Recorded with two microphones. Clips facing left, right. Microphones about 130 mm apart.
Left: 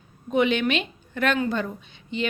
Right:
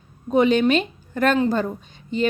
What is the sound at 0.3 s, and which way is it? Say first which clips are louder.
A woman's voice: right 5 dB; 35° right (ahead or behind).